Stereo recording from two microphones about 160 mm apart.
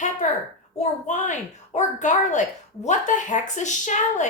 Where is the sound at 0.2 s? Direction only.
45° left (ahead or behind).